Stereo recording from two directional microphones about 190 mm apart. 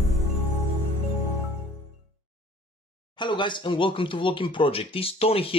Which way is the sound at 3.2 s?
25° left (ahead or behind).